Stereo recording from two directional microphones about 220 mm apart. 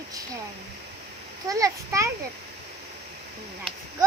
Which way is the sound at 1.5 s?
15° right (ahead or behind).